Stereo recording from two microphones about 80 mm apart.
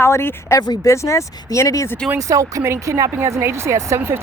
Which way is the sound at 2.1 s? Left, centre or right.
Right.